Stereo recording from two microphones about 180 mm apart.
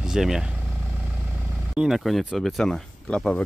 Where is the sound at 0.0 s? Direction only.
5° right (ahead or behind).